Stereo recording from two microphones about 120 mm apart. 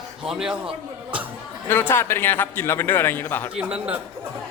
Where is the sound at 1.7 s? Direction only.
15° left (ahead or behind).